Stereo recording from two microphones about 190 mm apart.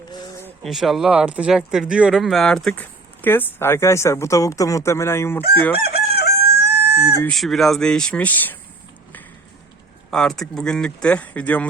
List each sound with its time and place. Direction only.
0.6 s speech: centre (ahead or behind)
5.8 s chicken: 55° left (ahead or behind)
7.3 s speech: centre (ahead or behind)
10.1 s speech: 5° left (ahead or behind)